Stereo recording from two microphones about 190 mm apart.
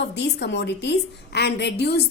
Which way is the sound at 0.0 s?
65° left (ahead or behind).